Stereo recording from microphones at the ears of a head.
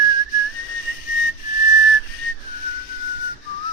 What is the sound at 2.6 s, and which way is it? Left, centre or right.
Whistling, left.